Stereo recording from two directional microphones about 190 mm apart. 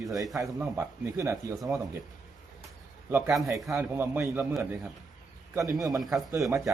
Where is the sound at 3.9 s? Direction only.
10° right (ahead or behind).